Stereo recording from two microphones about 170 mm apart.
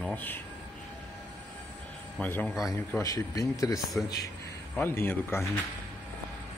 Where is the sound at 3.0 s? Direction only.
20° left (ahead or behind).